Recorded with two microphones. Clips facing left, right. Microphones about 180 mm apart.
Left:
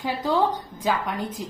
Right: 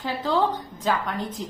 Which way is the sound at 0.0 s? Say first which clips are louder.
Left 1 dB; 15° left (ahead or behind).